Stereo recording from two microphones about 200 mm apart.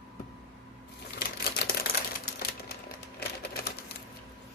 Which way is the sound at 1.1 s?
50° left (ahead or behind).